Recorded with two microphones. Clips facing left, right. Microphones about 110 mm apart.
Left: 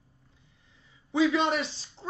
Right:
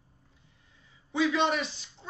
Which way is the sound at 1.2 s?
25° left (ahead or behind).